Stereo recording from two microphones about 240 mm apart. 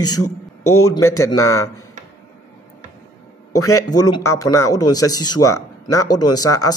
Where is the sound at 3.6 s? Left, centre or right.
Centre.